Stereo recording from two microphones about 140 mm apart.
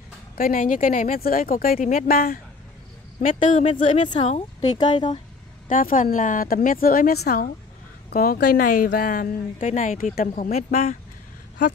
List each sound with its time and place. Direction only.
0.4 s speech: 80° left
3.2 s speech: 65° left (ahead or behind)
4.2 s speech: 50° left (ahead or behind)
4.9 s speech: 35° left (ahead or behind)
5.7 s a woman's voice: 80° left; by 11.0 s 50° left (ahead or behind)